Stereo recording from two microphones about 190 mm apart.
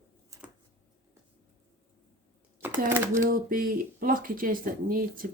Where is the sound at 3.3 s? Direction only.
50° right (ahead or behind).